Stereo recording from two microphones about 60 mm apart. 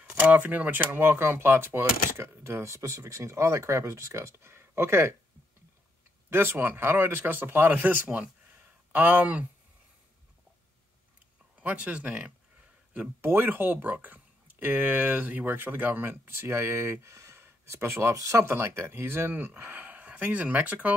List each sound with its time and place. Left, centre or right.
0.1 s speech: right
6.3 s speech: right
11.6 s speech: right
13.2 s speech: right
18.1 s speech: right
18.4 s speech: right